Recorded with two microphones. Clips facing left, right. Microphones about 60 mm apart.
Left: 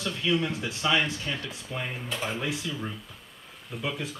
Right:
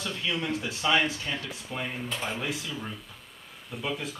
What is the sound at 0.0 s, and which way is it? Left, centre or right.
Speech, centre.